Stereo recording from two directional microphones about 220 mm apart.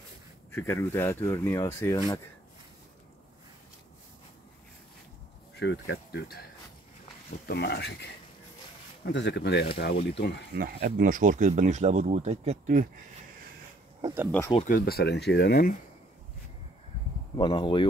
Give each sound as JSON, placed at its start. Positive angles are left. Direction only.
{"t": 0.5, "sound": "speech", "side_deg": 10}
{"t": 5.6, "sound": "speech", "side_deg": 50}
{"t": 7.4, "sound": "speech", "side_deg": 50}
{"t": 10.5, "sound": "speech", "side_deg": -45}
{"t": 14.0, "sound": "speech", "side_deg": -10}
{"t": 14.7, "sound": "speech", "side_deg": 45}
{"t": 17.4, "sound": "speech", "side_deg": 20}